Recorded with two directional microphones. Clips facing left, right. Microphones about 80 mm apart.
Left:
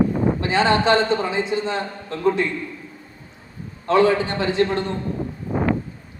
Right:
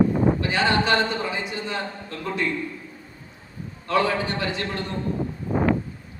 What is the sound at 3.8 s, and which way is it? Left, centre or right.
A man's voice, left.